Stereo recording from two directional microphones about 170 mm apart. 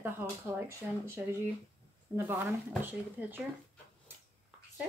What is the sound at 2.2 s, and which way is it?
A woman's voice, 10° right (ahead or behind).